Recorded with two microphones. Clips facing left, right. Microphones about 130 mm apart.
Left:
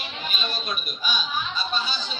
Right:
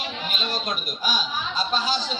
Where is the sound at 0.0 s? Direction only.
90° right.